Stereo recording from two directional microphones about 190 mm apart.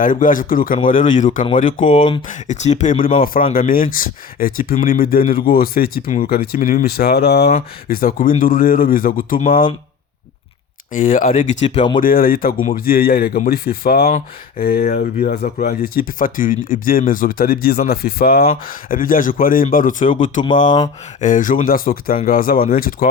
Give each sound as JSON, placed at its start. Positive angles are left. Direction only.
{"t": 0.0, "sound": "speech", "side_deg": 45}
{"t": 1.8, "sound": "speech", "side_deg": 30}
{"t": 2.2, "sound": "speech", "side_deg": 40}
{"t": 3.7, "sound": "speech", "side_deg": 50}
{"t": 10.9, "sound": "speech", "side_deg": 45}
{"t": 11.6, "sound": "speech", "side_deg": 25}
{"t": 11.9, "sound": "speech", "side_deg": 50}
{"t": 21.2, "sound": "speech", "side_deg": 40}